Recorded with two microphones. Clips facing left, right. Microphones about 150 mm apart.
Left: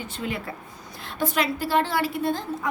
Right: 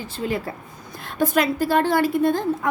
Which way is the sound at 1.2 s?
45° right (ahead or behind).